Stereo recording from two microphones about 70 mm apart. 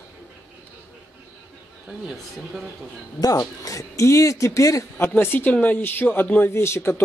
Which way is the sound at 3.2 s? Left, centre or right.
Left.